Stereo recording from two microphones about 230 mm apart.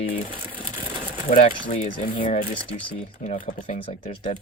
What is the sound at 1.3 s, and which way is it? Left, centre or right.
Speech, left.